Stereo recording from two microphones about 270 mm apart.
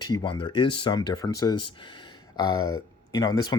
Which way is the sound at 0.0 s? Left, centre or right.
Centre.